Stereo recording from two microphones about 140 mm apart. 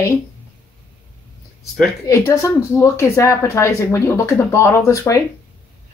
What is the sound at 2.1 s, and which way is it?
Speech, 20° left (ahead or behind).